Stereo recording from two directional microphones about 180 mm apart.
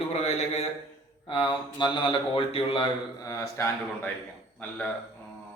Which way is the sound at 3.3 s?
15° left (ahead or behind).